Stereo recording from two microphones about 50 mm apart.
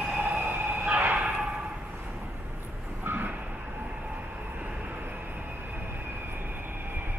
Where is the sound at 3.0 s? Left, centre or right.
Right.